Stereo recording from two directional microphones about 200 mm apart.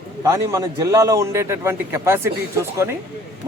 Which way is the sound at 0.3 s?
15° right (ahead or behind).